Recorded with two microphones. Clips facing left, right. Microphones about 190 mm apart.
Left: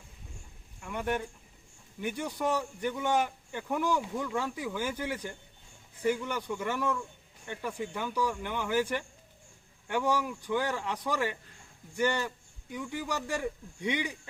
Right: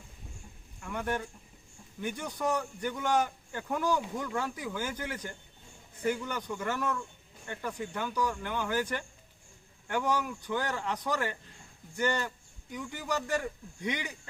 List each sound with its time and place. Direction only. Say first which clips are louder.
0.8 s a sound: left 1 dB; 10° left (ahead or behind)
2.0 s speech: left 2 dB; 10° left (ahead or behind)
12.7 s speech: even; 10° left (ahead or behind)